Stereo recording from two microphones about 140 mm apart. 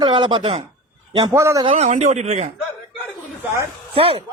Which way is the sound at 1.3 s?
20° right (ahead or behind).